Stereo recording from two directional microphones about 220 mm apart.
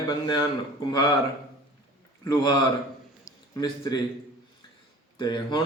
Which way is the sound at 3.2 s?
15° left (ahead or behind).